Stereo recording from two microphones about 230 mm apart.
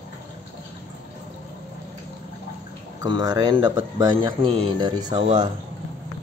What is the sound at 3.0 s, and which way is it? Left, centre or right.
Speech, centre.